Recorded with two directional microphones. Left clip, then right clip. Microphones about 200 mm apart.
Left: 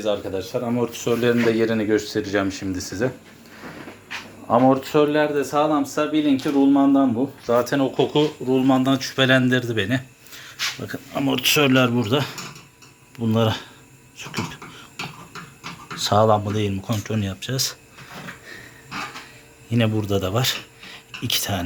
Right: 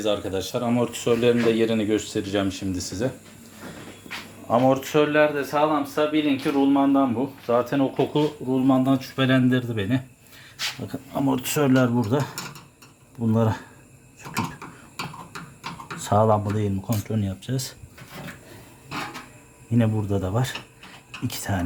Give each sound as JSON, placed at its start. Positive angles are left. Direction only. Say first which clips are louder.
{"t": 0.0, "sound": "speech", "louder": "left 1 dB", "side_deg": -35}
{"t": 0.6, "sound": "speech", "louder": "even", "side_deg": -20}
{"t": 4.4, "sound": "speech", "louder": "left 3 dB", "side_deg": 5}
{"t": 4.9, "sound": "speech", "louder": "left 1 dB", "side_deg": 20}
{"t": 7.4, "sound": "speech", "louder": "left 2 dB", "side_deg": 10}
{"t": 16.0, "sound": "speech", "louder": "left 3 dB", "side_deg": -10}
{"t": 19.7, "sound": "speech", "louder": "left 3 dB", "side_deg": -5}